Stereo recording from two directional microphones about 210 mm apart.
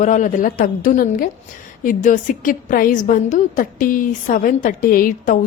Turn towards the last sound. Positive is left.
turn(degrees=40)  # may be behind; listen again after turning